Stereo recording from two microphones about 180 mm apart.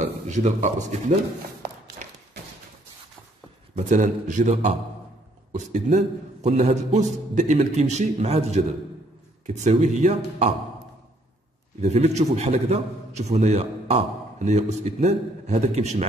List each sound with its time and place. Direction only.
0.0 s speech: 40° right (ahead or behind)
3.9 s a man's voice: 45° right (ahead or behind)
11.8 s a man's voice: 40° right (ahead or behind)